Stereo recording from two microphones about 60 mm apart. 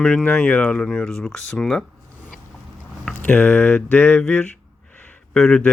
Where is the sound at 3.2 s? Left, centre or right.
Left.